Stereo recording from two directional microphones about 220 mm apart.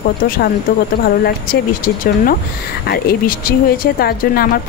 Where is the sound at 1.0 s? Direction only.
45° left (ahead or behind).